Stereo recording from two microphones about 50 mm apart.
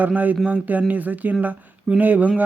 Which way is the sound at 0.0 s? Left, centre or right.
Right.